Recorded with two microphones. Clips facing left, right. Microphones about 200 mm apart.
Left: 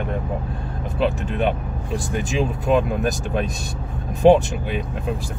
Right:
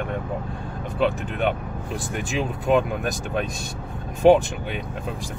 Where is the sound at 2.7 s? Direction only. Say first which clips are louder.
Left 1 dB; centre (ahead or behind).